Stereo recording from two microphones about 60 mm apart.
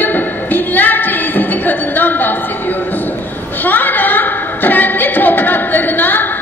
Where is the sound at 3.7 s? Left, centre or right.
Left.